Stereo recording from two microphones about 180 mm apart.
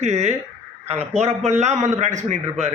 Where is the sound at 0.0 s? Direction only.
40° right (ahead or behind).